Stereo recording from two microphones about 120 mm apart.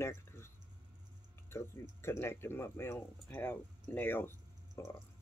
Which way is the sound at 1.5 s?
20° left (ahead or behind).